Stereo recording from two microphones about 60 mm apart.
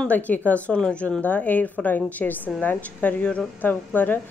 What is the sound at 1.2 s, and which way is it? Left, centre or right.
A woman's voice, left.